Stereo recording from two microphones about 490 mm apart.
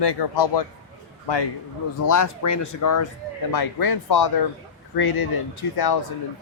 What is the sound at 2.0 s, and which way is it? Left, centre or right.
A man's voice, left.